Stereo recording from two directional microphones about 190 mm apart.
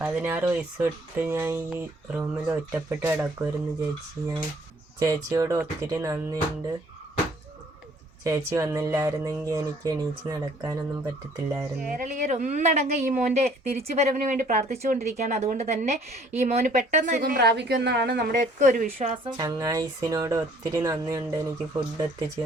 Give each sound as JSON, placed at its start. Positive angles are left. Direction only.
{"t": 0.0, "sound": "speech", "side_deg": -10}
{"t": 4.9, "sound": "speech", "side_deg": -20}
{"t": 8.2, "sound": "speech", "side_deg": -15}
{"t": 11.8, "sound": "a woman's voice", "side_deg": -45}
{"t": 18.9, "sound": "speech", "side_deg": -30}